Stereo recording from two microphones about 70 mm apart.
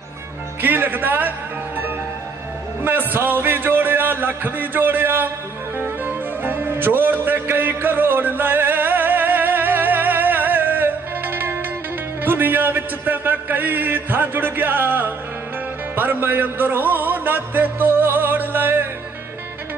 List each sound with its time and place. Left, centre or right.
0.6 s a man's voice: right
2.8 s a man's voice: right
6.0 s music: right
12.2 s a man's voice: right
16.0 s music: right